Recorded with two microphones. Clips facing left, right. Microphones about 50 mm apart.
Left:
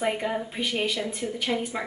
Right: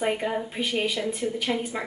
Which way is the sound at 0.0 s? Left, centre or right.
Centre.